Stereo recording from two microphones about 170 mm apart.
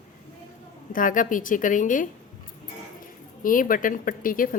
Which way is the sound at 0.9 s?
50° left (ahead or behind).